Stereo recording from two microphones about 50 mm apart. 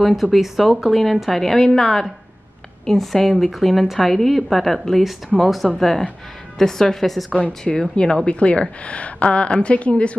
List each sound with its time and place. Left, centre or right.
0.0 s a woman's voice: centre
7.3 s a woman's voice: left